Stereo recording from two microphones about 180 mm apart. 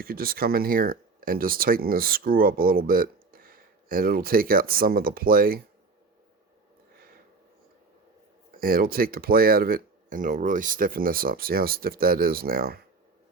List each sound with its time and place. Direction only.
0.0 s speech: 55° right (ahead or behind)
8.5 s speech: 55° right (ahead or behind)